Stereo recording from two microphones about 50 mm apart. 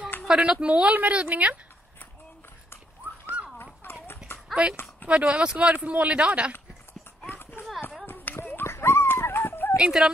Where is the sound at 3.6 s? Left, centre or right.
Left.